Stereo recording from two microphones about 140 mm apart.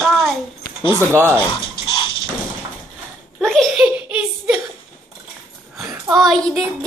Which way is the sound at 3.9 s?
10° right (ahead or behind).